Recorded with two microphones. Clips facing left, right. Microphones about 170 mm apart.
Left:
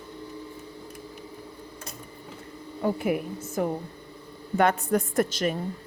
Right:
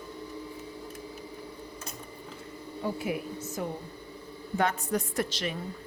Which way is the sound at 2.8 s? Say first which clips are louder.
Left 6 dB; 55° left (ahead or behind).